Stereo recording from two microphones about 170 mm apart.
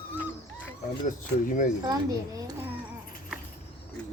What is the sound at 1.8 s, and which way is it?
Speech, 20° right (ahead or behind).